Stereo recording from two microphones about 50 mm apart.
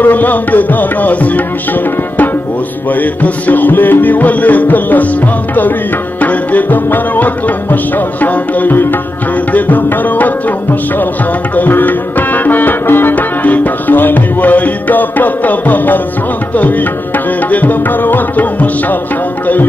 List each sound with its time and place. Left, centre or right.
0.0 s music: left